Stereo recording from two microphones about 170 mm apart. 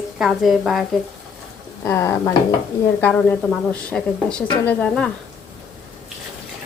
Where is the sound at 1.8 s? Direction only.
15° left (ahead or behind).